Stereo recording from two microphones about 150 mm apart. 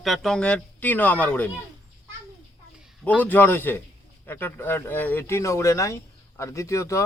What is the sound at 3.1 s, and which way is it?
Speech, 10° left (ahead or behind).